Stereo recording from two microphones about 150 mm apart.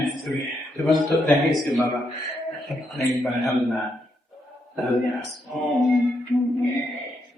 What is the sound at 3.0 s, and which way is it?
Speech, centre (ahead or behind).